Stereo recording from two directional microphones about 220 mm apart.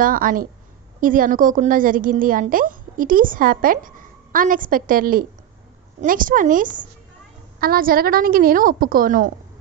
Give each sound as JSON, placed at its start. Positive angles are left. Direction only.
{"t": 0.0, "sound": "a woman's voice", "side_deg": -40}